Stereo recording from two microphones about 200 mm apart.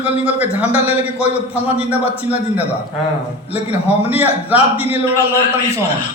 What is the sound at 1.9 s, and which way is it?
A man's voice, 30° left (ahead or behind).